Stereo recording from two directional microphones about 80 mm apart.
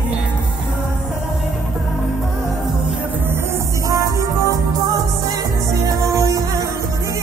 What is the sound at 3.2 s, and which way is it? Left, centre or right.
Music, right.